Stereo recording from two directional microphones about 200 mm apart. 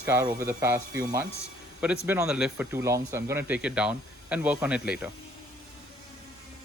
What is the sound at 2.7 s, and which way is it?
Speech, 15° right (ahead or behind).